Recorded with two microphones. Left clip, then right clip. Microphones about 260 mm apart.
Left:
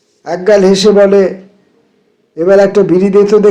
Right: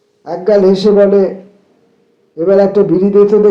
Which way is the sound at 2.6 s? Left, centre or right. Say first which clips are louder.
Left 2 dB; left.